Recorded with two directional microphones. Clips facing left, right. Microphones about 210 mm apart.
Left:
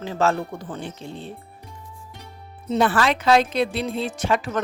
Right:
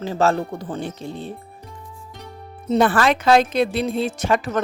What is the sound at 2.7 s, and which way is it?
Speech, 50° right (ahead or behind).